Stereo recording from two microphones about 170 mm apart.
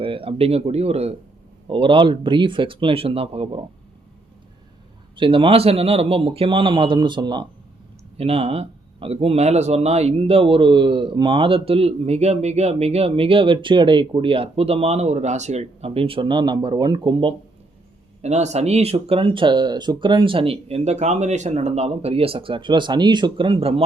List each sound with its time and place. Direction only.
0.0 s speech: 30° right (ahead or behind)
5.1 s speech: 30° right (ahead or behind)
18.2 s speech: 40° right (ahead or behind)